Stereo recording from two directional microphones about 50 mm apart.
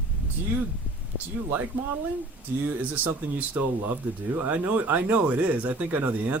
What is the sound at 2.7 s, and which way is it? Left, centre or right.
Speech, right.